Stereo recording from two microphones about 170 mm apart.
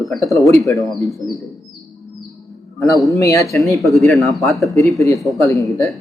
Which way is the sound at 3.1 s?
20° left (ahead or behind).